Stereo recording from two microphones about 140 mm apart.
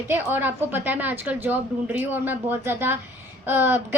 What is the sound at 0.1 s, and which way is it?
A woman's voice, 15° right (ahead or behind).